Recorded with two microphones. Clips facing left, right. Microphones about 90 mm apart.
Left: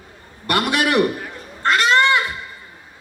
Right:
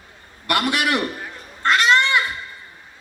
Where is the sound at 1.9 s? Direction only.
30° left (ahead or behind).